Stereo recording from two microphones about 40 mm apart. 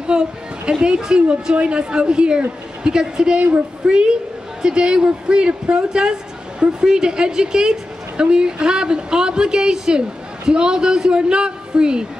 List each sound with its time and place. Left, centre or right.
0.0 s a woman's voice: right